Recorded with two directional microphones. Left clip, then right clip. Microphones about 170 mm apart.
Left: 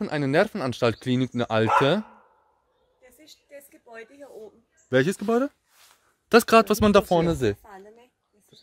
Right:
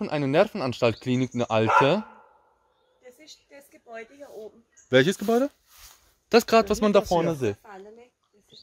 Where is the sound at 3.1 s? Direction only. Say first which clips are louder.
Left 6 dB; 45° left (ahead or behind).